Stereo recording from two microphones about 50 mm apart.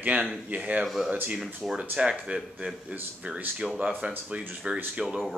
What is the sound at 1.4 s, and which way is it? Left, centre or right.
Speech, centre.